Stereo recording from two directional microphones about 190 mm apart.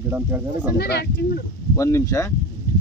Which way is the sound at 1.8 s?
15° left (ahead or behind).